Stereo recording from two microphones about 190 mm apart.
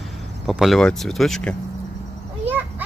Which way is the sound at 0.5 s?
Centre (ahead or behind).